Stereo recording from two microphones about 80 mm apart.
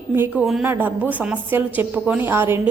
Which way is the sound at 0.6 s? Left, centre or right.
Right.